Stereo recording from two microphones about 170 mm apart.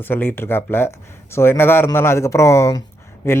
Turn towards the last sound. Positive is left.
turn(degrees=15)  # may be behind; listen again after turning